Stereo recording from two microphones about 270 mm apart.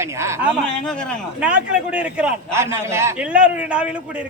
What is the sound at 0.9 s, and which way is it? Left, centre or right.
A man's voice, centre.